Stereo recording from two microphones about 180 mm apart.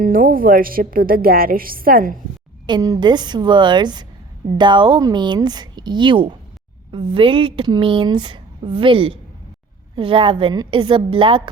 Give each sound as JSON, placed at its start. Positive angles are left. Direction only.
{"t": 0.0, "sound": "a woman's voice", "side_deg": -50}
{"t": 2.6, "sound": "speech", "side_deg": -20}